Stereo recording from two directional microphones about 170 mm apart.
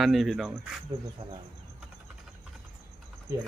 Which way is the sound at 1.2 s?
30° right (ahead or behind).